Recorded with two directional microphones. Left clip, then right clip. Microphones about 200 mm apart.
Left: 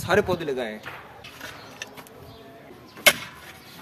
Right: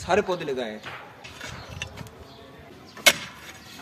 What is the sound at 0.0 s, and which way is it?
Speech, 40° left (ahead or behind).